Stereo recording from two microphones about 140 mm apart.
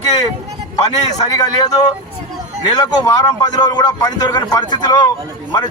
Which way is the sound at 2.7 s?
25° left (ahead or behind).